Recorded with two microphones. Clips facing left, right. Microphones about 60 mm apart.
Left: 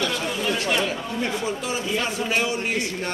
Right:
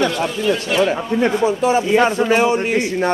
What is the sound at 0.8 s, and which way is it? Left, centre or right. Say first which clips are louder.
A man's voice: right 9 dB; right.